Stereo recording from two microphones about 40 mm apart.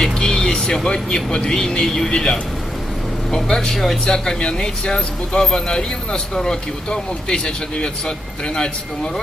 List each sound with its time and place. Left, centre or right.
0.0 s speech: centre
4.0 s speech: left